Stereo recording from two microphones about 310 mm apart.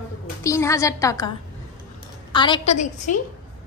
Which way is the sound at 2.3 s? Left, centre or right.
Centre.